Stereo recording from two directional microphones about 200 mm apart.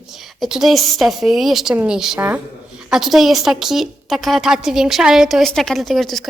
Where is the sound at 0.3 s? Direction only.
Centre (ahead or behind).